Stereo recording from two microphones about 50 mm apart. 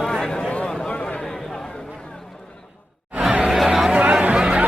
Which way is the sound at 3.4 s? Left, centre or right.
Centre.